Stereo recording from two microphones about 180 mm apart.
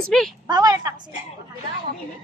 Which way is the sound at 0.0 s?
Centre (ahead or behind).